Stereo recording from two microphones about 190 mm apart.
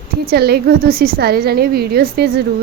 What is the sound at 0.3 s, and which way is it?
A woman's voice, 55° right (ahead or behind).